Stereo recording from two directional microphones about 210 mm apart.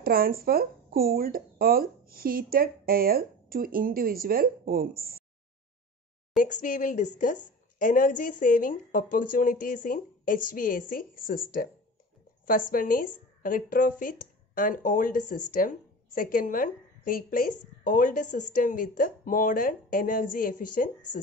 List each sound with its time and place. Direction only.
0.0 s speech: 45° right (ahead or behind)
6.3 s speech: 40° left (ahead or behind)